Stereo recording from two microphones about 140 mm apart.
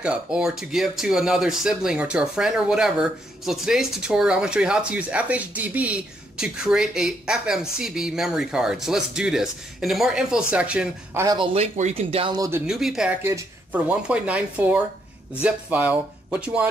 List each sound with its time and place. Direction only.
0.0 s speech: 5° right (ahead or behind)
11.2 s speech: 35° right (ahead or behind)
12.4 s speech: 20° right (ahead or behind)
12.6 s speech: 5° right (ahead or behind)
13.2 s speech: 20° right (ahead or behind)
13.7 s speech: 10° right (ahead or behind)